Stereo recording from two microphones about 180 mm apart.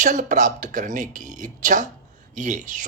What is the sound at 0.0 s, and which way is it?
Speech, 45° right (ahead or behind).